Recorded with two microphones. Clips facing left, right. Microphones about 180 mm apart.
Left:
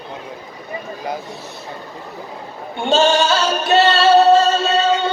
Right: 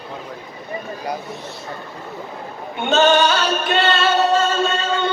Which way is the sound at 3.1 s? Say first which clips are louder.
Left 1 dB; 30° left (ahead or behind).